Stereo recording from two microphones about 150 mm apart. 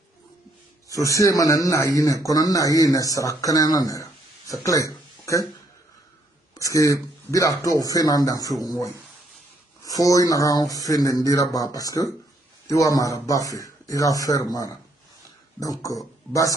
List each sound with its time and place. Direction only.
0.8 s speech: 20° left (ahead or behind)
6.6 s speech: 20° left (ahead or behind)